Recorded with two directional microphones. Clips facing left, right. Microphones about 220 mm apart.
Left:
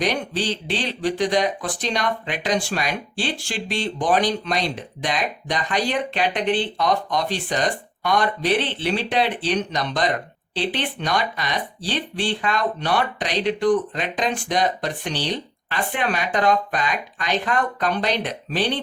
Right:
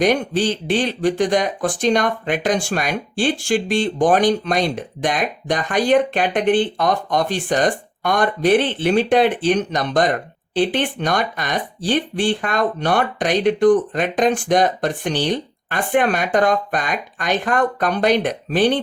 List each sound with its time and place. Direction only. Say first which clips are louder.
0.0 s speech: right 6 dB; 50° right (ahead or behind)